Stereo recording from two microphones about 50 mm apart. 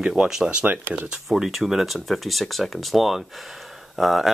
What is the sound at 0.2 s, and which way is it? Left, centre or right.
Speech, centre.